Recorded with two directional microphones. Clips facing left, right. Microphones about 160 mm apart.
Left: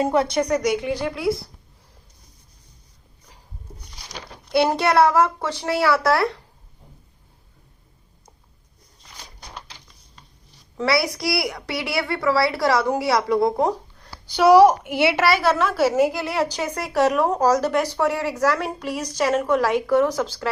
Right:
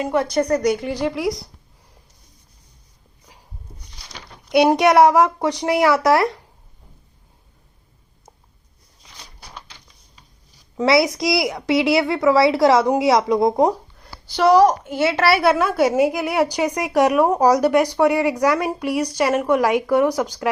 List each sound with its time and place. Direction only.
0.3 s a woman's voice: 5° right (ahead or behind)
4.5 s a woman's voice: 15° right (ahead or behind)
10.8 s a woman's voice: 20° right (ahead or behind)
14.3 s a woman's voice: centre (ahead or behind)
15.2 s a woman's voice: 10° right (ahead or behind)